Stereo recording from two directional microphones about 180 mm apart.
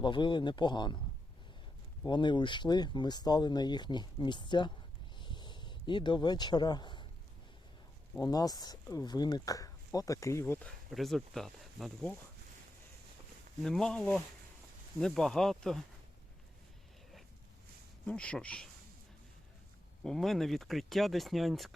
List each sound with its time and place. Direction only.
0.0 s speech: 25° left (ahead or behind)
2.0 s speech: 25° left (ahead or behind)
5.1 s a sound: 25° left (ahead or behind)
8.2 s speech: 20° left (ahead or behind); by 12.1 s centre (ahead or behind)
13.6 s speech: 5° left (ahead or behind)
18.0 s speech: 5° left (ahead or behind)
20.1 s speech: centre (ahead or behind)